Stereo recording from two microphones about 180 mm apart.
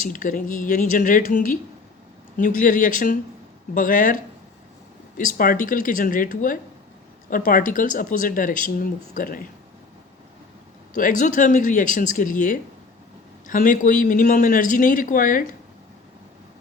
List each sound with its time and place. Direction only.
0.0 s speech: 50° left (ahead or behind)
5.4 s speech: 50° left (ahead or behind)
10.9 s speech: 45° left (ahead or behind)